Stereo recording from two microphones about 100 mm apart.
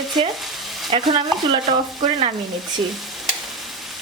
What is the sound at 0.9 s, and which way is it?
Stir, 45° right (ahead or behind).